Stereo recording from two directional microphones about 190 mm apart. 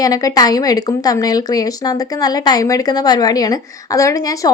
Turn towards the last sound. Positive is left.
turn(degrees=15)  # may be behind; listen again after turning